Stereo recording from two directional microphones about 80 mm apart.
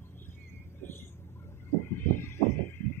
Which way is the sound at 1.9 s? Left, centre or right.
Left.